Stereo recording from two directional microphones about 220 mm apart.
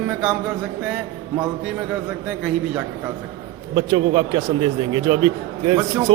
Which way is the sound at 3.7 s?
20° right (ahead or behind).